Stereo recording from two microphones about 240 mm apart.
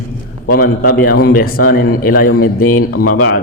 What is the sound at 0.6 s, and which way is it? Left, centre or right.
A man's voice, left.